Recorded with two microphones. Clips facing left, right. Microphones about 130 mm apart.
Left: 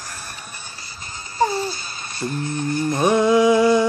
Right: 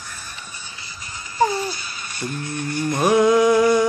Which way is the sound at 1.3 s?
30° left (ahead or behind).